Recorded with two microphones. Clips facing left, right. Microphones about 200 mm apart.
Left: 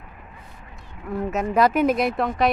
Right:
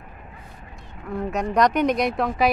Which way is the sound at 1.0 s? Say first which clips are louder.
Left 1 dB; 5° left (ahead or behind).